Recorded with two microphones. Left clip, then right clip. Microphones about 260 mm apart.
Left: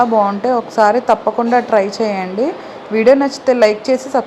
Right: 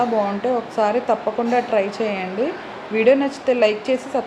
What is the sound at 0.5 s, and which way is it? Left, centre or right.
A woman's voice, left.